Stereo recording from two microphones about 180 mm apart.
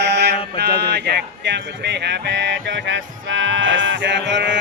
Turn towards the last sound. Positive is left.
turn(degrees=-75)  # may be behind; listen again after turning